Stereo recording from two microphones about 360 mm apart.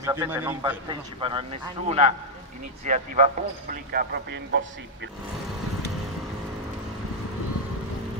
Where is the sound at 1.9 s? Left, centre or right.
Centre.